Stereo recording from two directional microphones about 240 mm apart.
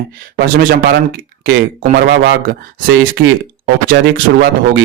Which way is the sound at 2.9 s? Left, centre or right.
Right.